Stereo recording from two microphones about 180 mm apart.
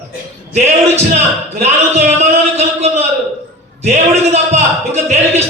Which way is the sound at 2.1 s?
40° right (ahead or behind).